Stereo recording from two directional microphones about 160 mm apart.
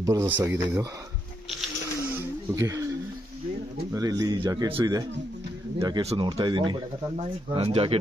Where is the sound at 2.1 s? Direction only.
20° right (ahead or behind).